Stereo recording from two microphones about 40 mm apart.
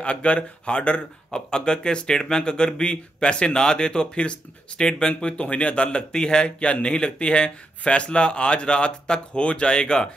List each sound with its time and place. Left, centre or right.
0.0 s speech: left